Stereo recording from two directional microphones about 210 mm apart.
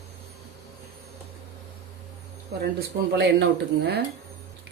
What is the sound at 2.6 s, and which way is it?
Speech, 50° right (ahead or behind).